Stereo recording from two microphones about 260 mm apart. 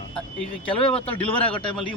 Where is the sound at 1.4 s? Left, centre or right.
Centre.